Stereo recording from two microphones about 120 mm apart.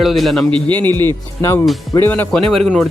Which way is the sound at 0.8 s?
35° right (ahead or behind).